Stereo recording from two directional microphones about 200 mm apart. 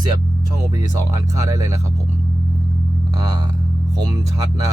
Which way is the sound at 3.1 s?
20° right (ahead or behind).